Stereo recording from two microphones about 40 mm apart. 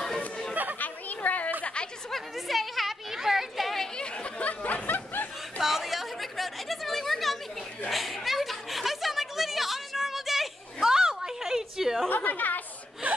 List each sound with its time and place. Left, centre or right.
0.7 s chatter: left
2.0 s a sound: centre
3.9 s chatter: left
4.5 s snicker: left
5.6 s chatter: centre
7.9 s a sound: centre
12.1 s chatter: left